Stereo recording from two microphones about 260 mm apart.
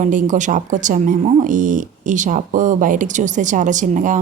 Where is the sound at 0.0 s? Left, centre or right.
Right.